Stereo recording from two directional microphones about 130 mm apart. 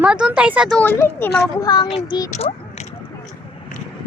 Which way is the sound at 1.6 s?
35° left (ahead or behind).